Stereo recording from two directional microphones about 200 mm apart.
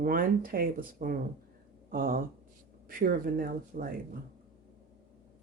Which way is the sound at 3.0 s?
45° right (ahead or behind).